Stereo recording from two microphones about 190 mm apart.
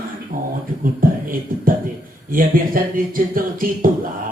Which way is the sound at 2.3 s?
50° right (ahead or behind).